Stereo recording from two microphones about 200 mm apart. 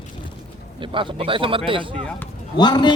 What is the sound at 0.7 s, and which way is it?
Speech, 25° right (ahead or behind).